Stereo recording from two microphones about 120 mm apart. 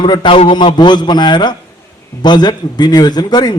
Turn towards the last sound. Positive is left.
turn(degrees=35)  # may be behind; listen again after turning